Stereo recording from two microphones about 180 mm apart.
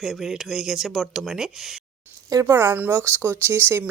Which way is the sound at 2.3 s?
15° right (ahead or behind).